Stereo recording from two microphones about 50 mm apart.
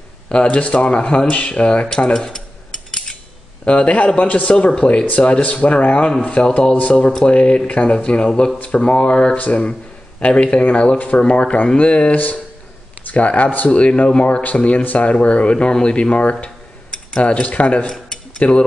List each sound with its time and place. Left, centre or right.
0.3 s speech: left
3.6 s speech: left
17.8 s dishes: centre